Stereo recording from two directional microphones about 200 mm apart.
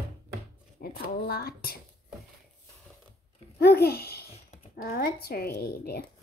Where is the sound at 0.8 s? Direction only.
50° left (ahead or behind).